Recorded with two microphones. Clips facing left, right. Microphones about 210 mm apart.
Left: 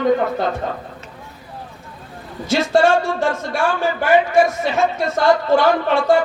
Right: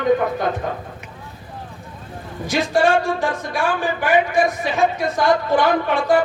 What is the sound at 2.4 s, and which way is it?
A man's voice, 15° right (ahead or behind).